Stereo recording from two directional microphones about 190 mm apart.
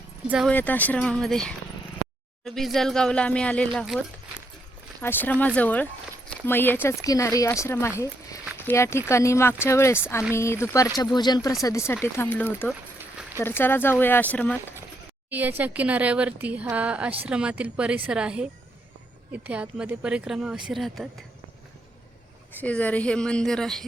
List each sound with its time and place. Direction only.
0.3 s speech: 5° right (ahead or behind)
0.5 s speech: 10° left (ahead or behind)
15.3 s speech: 10° right (ahead or behind)
22.6 s speech: 5° left (ahead or behind)